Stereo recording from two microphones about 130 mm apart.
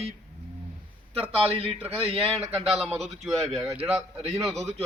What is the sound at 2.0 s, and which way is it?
Speech, 45° right (ahead or behind).